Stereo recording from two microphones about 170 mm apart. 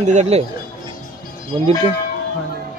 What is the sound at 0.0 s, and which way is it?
Speech, 40° right (ahead or behind).